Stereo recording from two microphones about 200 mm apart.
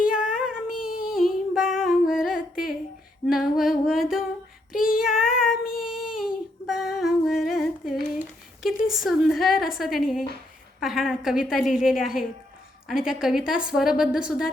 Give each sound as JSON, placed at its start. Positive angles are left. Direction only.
{"t": 0.1, "sound": "female singing", "side_deg": -5}
{"t": 3.2, "sound": "singing", "side_deg": -5}
{"t": 4.8, "sound": "child singing", "side_deg": 45}
{"t": 5.8, "sound": "a sound", "side_deg": 0}
{"t": 6.7, "sound": "female singing", "side_deg": 0}
{"t": 8.2, "sound": "a sound", "side_deg": 0}
{"t": 10.8, "sound": "a woman's voice", "side_deg": 0}